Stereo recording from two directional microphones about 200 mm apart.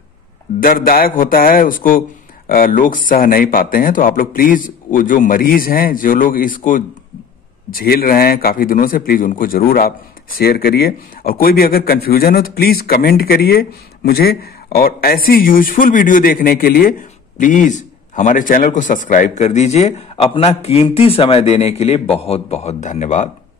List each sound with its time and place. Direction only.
0.6 s a man's voice: 45° left (ahead or behind)